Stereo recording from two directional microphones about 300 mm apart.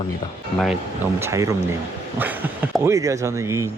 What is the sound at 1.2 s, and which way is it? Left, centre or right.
Speech, centre.